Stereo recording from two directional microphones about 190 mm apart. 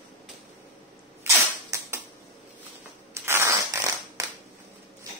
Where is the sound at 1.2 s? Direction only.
15° right (ahead or behind).